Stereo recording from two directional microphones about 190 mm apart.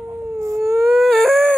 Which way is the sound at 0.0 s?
15° right (ahead or behind).